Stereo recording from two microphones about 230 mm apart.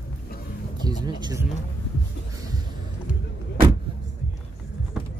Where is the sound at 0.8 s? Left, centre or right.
Centre.